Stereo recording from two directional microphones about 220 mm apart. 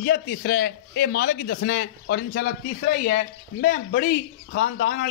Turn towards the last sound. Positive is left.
turn(degrees=45)  # may be behind; listen again after turning